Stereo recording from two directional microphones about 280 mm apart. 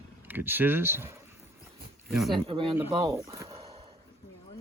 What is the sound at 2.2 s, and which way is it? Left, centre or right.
Speech, centre.